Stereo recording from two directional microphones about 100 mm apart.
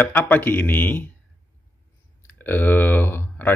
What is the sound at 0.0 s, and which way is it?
Speech, 20° left (ahead or behind).